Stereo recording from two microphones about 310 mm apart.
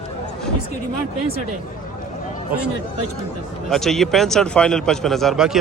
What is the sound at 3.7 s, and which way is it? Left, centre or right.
A man's voice, centre.